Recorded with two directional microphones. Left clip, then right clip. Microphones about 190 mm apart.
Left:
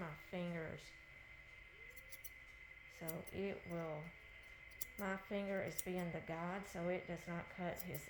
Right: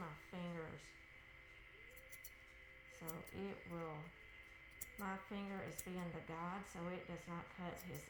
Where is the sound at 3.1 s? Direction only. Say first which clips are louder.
Left 5 dB; 40° left (ahead or behind).